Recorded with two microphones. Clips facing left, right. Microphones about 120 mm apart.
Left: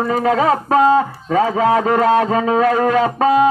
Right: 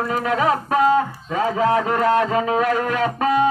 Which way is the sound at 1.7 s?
35° left (ahead or behind).